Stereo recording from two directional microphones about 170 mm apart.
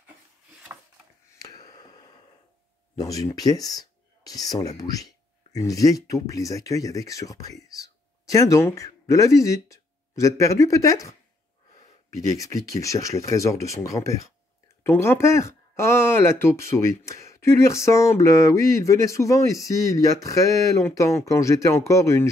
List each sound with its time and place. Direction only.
1.4 s a sound: 20° left (ahead or behind)
3.0 s speech: 20° left (ahead or behind)
12.3 s speech: 20° left (ahead or behind)